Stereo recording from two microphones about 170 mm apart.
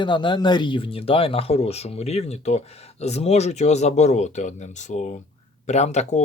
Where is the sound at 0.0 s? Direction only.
25° left (ahead or behind).